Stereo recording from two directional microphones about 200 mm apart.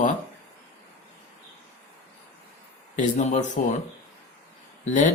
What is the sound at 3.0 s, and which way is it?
Speech, 40° left (ahead or behind).